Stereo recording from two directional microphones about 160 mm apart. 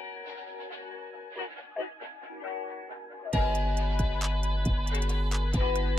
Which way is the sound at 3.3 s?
5° left (ahead or behind).